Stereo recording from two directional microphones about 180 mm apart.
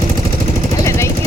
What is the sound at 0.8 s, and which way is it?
Vehicle, 15° left (ahead or behind).